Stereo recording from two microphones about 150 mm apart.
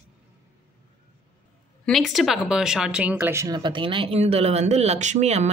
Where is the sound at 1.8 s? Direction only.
Centre (ahead or behind).